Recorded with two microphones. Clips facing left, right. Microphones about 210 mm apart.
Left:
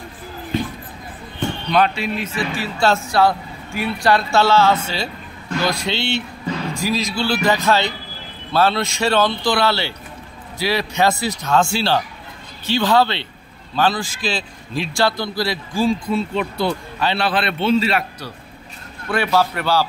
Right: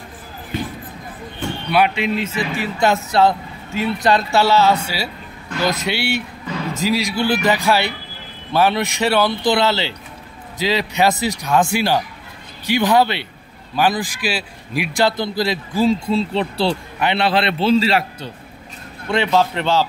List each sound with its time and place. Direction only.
1.7 s speech: 10° right (ahead or behind)
2.2 s a man's voice: 20° right (ahead or behind)